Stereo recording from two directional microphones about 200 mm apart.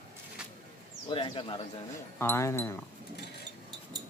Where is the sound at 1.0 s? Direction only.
25° left (ahead or behind).